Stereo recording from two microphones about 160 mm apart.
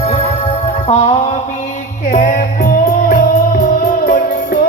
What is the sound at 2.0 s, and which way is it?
Music, 55° left (ahead or behind).